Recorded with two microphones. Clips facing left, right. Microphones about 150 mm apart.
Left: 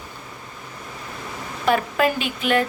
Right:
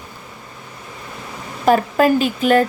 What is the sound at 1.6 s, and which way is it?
Speech, 40° right (ahead or behind).